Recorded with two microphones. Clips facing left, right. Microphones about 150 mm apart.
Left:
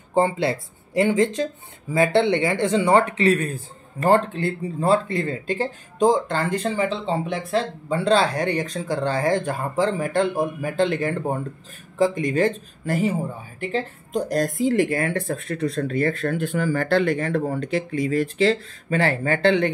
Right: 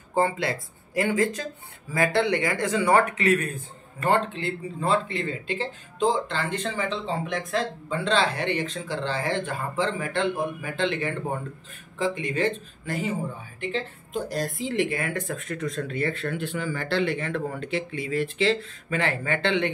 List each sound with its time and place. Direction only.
0.1 s a man's voice: 25° left (ahead or behind)